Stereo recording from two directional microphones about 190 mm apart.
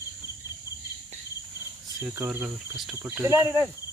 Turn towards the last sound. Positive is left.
turn(degrees=-10)  # may be behind; listen again after turning